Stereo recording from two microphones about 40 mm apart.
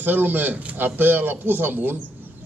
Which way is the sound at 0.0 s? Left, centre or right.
Right.